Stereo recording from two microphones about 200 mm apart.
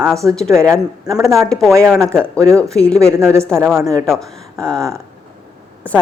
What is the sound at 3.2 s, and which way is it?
Speech, 15° right (ahead or behind).